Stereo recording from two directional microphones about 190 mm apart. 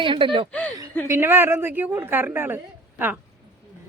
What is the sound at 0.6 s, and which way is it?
Speech, 10° left (ahead or behind).